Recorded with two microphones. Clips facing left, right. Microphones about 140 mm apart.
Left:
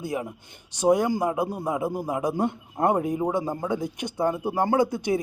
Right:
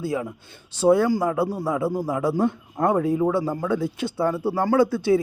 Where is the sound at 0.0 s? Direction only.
20° left (ahead or behind).